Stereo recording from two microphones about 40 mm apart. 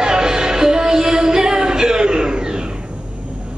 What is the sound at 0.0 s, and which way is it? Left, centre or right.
Music, centre.